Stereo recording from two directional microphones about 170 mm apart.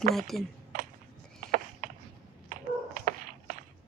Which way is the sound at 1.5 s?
55° right (ahead or behind).